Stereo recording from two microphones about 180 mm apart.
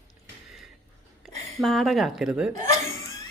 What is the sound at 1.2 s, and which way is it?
Speech, centre (ahead or behind).